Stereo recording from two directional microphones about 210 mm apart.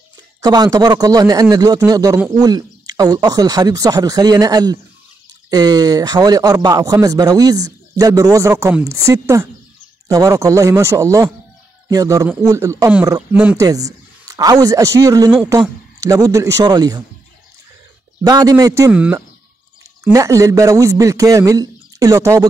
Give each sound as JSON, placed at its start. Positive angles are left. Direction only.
{"t": 0.4, "sound": "speech", "side_deg": -20}
{"t": 18.2, "sound": "speech", "side_deg": -15}